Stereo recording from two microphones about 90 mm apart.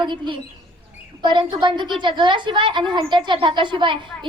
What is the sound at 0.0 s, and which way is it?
A woman's voice, 60° right (ahead or behind).